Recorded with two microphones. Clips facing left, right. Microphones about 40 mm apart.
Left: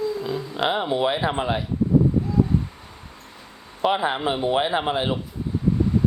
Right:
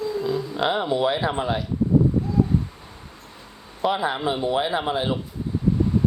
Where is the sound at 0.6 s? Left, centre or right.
Centre.